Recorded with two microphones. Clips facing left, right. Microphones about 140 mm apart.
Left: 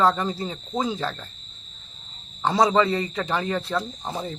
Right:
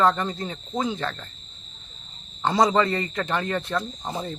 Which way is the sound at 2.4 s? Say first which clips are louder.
Left 1 dB; centre (ahead or behind).